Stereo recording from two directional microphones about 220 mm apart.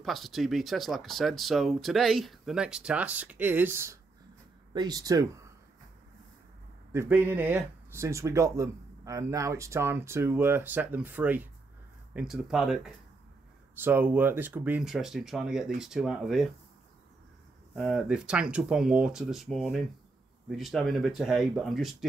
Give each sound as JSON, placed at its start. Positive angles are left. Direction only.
{"t": 0.0, "sound": "speech", "side_deg": 0}
{"t": 6.9, "sound": "speech", "side_deg": -10}
{"t": 17.7, "sound": "speech", "side_deg": 0}